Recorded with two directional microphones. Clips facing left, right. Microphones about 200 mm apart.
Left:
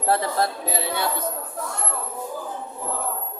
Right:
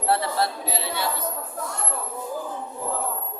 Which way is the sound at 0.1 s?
45° left (ahead or behind).